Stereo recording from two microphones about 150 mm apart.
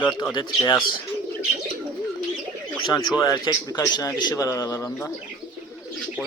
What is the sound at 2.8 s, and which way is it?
A man's voice, 30° left (ahead or behind).